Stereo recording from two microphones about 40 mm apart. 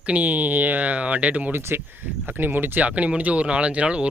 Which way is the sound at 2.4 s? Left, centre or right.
Right.